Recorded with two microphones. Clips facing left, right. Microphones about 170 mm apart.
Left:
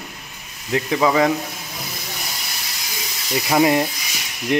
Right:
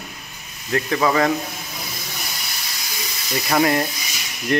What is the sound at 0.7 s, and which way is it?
Speech, 15° left (ahead or behind).